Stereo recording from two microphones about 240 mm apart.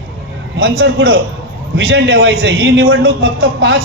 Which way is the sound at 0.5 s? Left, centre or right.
Right.